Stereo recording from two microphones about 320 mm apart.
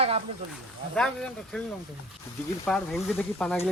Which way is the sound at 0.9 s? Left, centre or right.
Centre.